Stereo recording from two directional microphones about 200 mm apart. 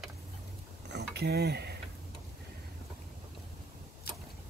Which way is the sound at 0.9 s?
55° right (ahead or behind).